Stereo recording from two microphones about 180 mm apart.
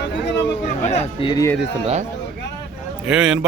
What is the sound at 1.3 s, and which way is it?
Speech, 20° left (ahead or behind).